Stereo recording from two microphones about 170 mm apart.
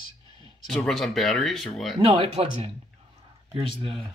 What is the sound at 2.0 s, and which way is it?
Speech, 35° right (ahead or behind).